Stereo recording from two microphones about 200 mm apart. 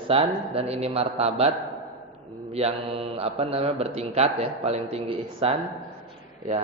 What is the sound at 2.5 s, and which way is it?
A man's voice, 30° right (ahead or behind).